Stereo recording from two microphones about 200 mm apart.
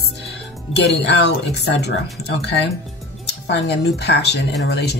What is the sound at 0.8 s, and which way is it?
Speech, 60° left (ahead or behind).